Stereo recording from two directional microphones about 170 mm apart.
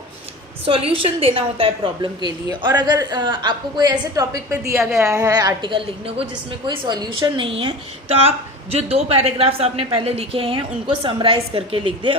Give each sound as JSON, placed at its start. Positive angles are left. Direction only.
{"t": 0.6, "sound": "a woman's voice", "side_deg": -35}